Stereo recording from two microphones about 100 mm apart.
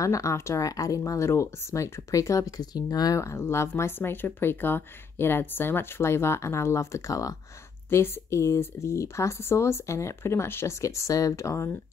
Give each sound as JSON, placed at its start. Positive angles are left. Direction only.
{"t": 0.0, "sound": "speech", "side_deg": 35}